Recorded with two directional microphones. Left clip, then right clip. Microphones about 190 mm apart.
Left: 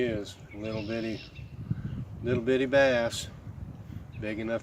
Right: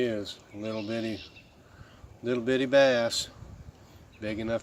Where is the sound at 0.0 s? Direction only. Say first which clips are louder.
Right 1 dB; 20° right (ahead or behind).